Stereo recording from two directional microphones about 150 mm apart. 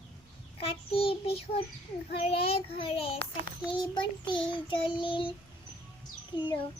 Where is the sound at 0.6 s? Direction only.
40° left (ahead or behind).